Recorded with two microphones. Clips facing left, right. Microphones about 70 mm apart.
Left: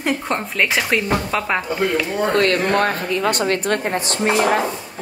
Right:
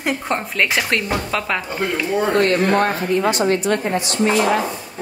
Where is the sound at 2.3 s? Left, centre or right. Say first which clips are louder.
Even; left.